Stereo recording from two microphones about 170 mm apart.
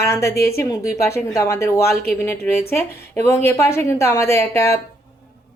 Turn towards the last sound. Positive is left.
turn(degrees=15)  # may be behind; listen again after turning